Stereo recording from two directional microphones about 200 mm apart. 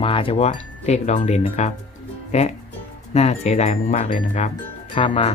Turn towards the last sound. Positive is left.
turn(degrees=25)  # may be behind; listen again after turning